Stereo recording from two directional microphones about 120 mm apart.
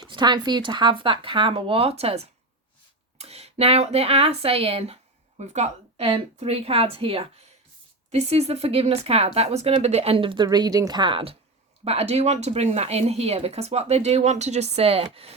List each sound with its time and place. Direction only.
0.0 s speech: 40° right (ahead or behind); by 4.9 s 55° right (ahead or behind)
5.4 s a woman's voice: 70° right (ahead or behind)
6.1 s speech: 55° right (ahead or behind)
8.1 s speech: 65° right (ahead or behind); by 11.3 s 50° right (ahead or behind)
11.9 s speech: 60° right (ahead or behind)